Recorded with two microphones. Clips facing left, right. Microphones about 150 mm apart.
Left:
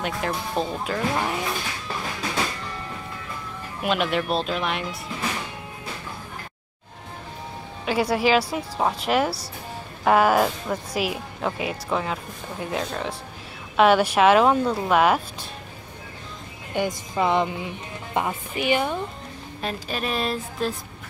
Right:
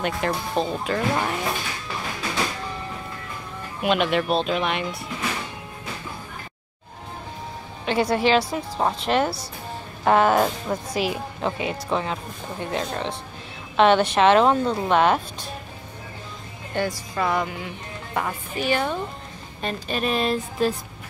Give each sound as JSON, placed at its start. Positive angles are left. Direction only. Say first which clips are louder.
{"t": 0.0, "sound": "a woman's voice", "louder": "right 2 dB", "side_deg": 0}
{"t": 3.8, "sound": "a woman's voice", "louder": "right 2 dB", "side_deg": 0}
{"t": 7.8, "sound": "a woman's voice", "louder": "right 1 dB", "side_deg": 5}
{"t": 16.7, "sound": "speech", "louder": "left 1 dB", "side_deg": 20}
{"t": 19.6, "sound": "a woman's voice", "louder": "right 3 dB", "side_deg": 0}